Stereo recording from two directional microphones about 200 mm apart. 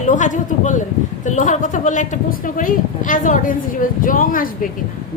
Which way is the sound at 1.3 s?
40° left (ahead or behind).